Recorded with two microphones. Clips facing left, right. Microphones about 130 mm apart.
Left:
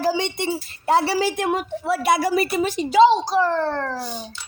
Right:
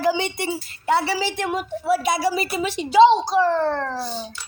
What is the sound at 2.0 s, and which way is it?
Speech, 55° left (ahead or behind).